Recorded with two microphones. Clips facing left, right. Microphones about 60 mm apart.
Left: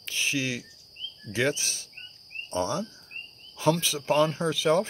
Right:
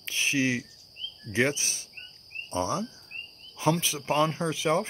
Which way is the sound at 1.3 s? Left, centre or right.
Right.